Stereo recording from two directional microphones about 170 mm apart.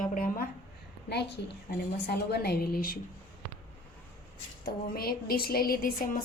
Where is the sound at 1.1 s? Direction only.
85° left.